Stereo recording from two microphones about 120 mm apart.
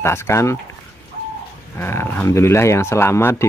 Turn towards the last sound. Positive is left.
turn(degrees=20)  # may be behind; listen again after turning